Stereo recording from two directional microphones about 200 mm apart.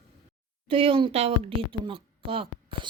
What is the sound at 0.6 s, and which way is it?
Speech, 25° right (ahead or behind).